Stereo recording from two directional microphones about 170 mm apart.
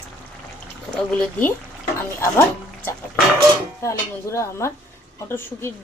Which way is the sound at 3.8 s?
15° left (ahead or behind).